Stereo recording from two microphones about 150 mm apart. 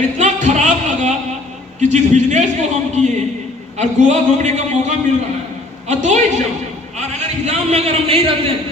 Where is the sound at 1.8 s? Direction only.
50° right (ahead or behind).